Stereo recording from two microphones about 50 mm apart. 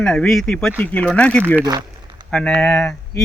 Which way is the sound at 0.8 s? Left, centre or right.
Left.